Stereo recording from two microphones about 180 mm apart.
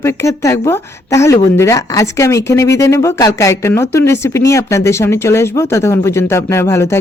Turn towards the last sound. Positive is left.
turn(degrees=15)  # may be behind; listen again after turning